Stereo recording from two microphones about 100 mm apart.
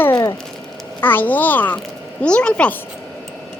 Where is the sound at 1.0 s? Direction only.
20° left (ahead or behind).